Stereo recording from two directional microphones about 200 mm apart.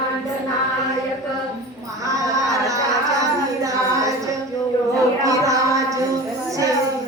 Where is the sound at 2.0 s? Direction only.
15° right (ahead or behind).